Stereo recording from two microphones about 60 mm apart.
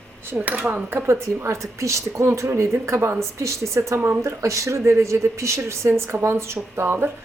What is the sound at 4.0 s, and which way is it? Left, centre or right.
Speech, right.